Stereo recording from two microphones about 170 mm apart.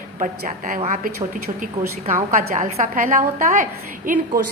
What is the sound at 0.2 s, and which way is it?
A woman's voice, 50° right (ahead or behind).